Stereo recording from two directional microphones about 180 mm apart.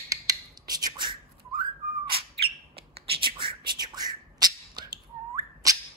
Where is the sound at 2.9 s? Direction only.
30° right (ahead or behind).